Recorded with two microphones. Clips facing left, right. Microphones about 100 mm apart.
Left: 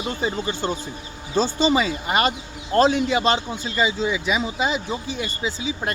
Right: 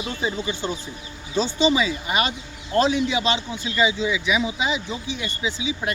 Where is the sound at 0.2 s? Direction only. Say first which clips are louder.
Even; 45° left (ahead or behind).